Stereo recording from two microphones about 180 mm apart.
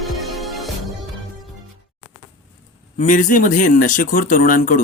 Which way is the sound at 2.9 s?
45° left (ahead or behind).